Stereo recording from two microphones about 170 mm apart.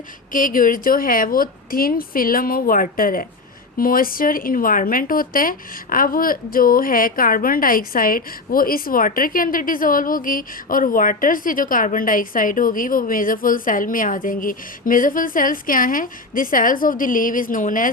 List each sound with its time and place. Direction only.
0.3 s speech: 55° left (ahead or behind)